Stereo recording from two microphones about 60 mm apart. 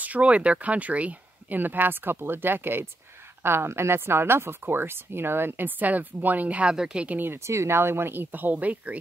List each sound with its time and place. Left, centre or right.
0.0 s speech: right
6.7 s a woman's voice: centre
7.1 s speech: right
7.3 s speech: right